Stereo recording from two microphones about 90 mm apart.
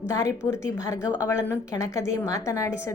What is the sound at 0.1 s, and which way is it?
A woman's voice, 35° left (ahead or behind).